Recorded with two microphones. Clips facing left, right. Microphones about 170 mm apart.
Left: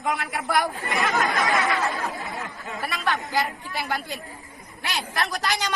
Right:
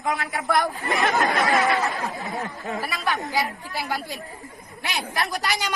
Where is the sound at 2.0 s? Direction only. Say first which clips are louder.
Right 2 dB; 20° right (ahead or behind).